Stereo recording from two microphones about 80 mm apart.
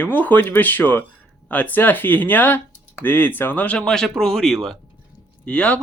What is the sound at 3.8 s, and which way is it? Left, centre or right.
Speech, centre.